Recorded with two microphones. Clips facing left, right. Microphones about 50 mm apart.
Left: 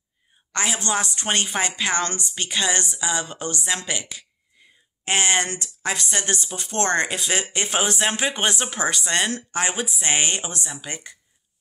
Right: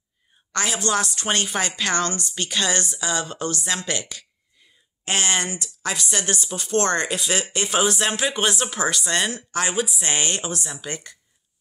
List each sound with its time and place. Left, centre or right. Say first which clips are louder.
0.5 s a woman's voice: right 1 dB; left
5.0 s a woman's voice: left 2 dB; left